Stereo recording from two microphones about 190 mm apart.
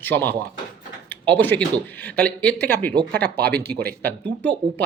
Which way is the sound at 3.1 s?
55° right (ahead or behind).